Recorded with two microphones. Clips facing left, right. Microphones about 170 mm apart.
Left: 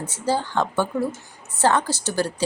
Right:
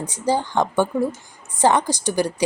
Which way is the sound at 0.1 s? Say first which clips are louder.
Right 2 dB; 15° right (ahead or behind).